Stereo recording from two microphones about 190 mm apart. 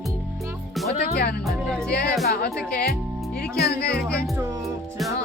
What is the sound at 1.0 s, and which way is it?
Speech, 55° left (ahead or behind).